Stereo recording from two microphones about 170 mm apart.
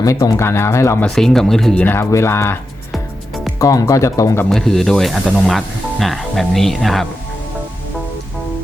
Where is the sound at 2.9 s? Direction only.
Centre (ahead or behind).